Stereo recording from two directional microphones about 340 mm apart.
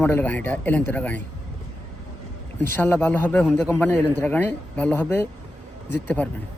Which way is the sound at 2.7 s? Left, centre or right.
Centre.